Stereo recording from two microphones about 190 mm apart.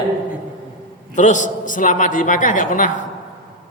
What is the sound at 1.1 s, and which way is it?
A man's voice, 40° left (ahead or behind).